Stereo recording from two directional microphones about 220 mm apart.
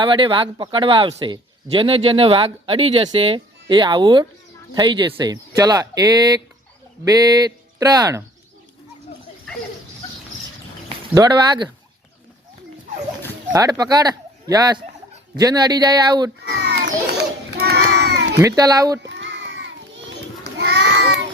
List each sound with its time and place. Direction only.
0.0 s speech: 20° right (ahead or behind)
10.8 s speech: 20° right (ahead or behind)
13.5 s speech: 15° right (ahead or behind)
16.4 s children playing: 50° right (ahead or behind)
18.3 s speech: 15° right (ahead or behind)
19.0 s children playing: 55° right (ahead or behind)